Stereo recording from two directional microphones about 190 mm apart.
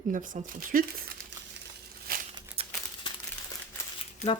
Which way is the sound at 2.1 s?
50° right (ahead or behind).